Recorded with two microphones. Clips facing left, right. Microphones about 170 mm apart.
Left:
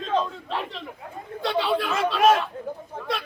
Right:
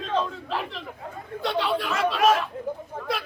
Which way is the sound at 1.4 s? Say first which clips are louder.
Left 2 dB; centre (ahead or behind).